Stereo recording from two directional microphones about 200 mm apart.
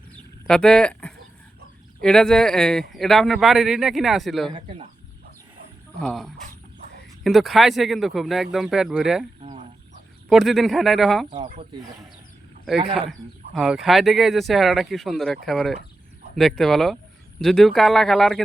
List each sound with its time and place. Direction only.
0.4 s speech: 5° left (ahead or behind)
6.0 s speech: centre (ahead or behind)
12.8 s speech: 30° right (ahead or behind)
13.1 s speech: centre (ahead or behind)